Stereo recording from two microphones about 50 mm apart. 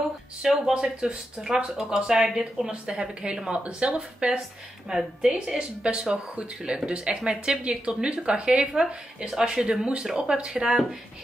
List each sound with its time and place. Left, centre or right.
0.4 s speech: centre